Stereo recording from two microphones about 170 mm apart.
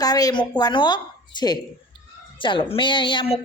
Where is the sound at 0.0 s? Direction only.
20° left (ahead or behind).